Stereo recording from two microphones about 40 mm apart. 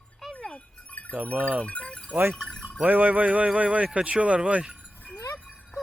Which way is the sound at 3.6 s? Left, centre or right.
Right.